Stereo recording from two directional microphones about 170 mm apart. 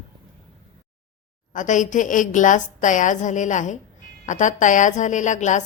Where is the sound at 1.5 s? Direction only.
50° left (ahead or behind).